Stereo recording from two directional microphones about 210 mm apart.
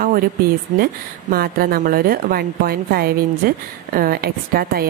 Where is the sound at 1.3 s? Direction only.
45° right (ahead or behind).